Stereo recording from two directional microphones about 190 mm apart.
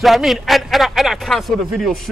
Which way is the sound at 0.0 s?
Centre (ahead or behind).